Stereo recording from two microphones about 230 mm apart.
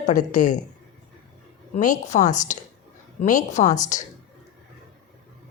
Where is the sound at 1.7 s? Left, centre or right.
Left.